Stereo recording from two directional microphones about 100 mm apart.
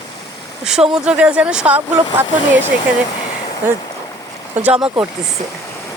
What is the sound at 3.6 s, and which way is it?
Speech, 20° right (ahead or behind).